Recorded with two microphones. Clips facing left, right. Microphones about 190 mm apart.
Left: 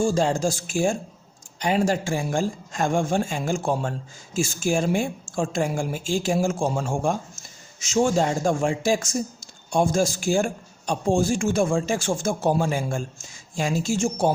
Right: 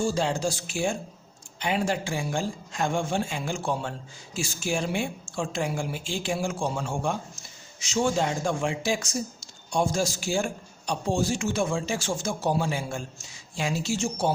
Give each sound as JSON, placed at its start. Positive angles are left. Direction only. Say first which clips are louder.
{"t": 0.0, "sound": "speech", "louder": "left 4 dB", "side_deg": 45}